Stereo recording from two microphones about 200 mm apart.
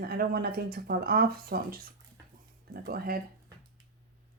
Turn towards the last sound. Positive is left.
turn(degrees=-50)  # may be behind; listen again after turning